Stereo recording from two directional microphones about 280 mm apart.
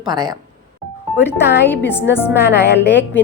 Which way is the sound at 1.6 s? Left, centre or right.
Centre.